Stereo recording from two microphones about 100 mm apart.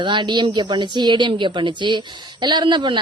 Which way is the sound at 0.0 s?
50° right (ahead or behind).